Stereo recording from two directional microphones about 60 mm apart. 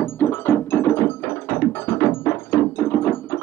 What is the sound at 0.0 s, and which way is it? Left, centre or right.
Music, left.